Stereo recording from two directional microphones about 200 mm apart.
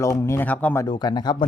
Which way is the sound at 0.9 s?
20° left (ahead or behind).